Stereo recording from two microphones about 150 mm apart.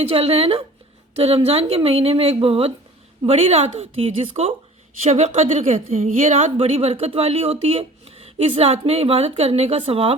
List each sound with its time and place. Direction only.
0.1 s speech: 40° right (ahead or behind)